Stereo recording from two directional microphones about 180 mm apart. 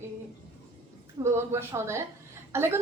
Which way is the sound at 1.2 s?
15° right (ahead or behind).